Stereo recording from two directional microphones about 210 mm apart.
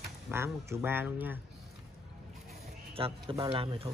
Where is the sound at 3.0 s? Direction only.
25° right (ahead or behind).